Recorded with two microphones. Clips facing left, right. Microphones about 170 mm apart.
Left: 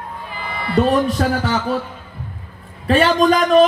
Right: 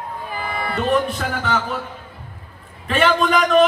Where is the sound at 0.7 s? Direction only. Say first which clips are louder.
Left 5 dB; 35° left (ahead or behind).